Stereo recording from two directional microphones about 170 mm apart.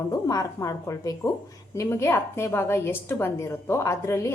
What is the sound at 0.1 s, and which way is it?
A woman's voice, 20° left (ahead or behind).